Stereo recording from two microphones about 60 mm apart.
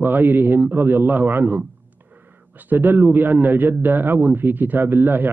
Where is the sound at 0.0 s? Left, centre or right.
Right.